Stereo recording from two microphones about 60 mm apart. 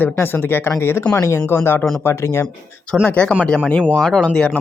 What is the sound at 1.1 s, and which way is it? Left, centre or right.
Speech, left.